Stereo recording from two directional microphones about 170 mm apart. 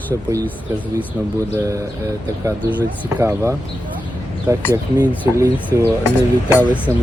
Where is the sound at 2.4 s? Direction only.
10° right (ahead or behind).